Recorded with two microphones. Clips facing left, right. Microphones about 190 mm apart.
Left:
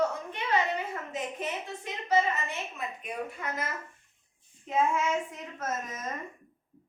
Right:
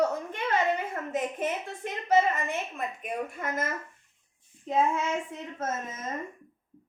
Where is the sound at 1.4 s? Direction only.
50° right (ahead or behind).